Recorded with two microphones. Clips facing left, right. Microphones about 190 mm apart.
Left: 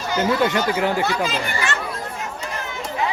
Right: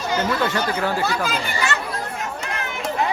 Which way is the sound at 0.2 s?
15° left (ahead or behind).